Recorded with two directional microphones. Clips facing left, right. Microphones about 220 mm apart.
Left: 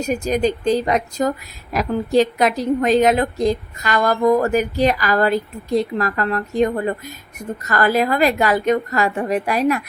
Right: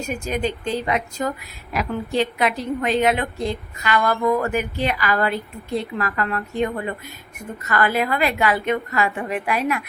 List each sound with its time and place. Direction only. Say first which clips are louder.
0.1 s a woman's voice: left 6 dB; 40° left (ahead or behind)